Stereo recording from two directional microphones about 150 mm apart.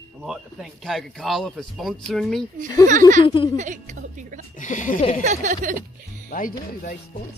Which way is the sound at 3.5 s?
55° right (ahead or behind).